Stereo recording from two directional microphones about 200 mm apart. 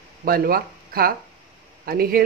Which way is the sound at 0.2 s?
45° right (ahead or behind).